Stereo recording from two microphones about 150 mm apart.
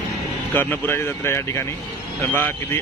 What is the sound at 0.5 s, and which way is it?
Speech, 15° left (ahead or behind).